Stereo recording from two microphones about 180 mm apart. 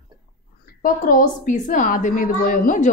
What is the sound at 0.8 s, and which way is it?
A woman's voice, 50° left (ahead or behind).